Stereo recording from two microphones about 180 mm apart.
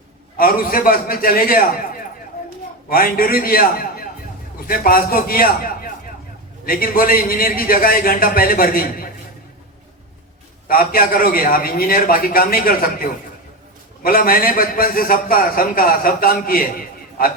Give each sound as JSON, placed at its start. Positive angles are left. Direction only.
{"t": 0.3, "sound": "a man's voice", "side_deg": 55}
{"t": 2.9, "sound": "a man's voice", "side_deg": 55}
{"t": 10.7, "sound": "a man's voice", "side_deg": 55}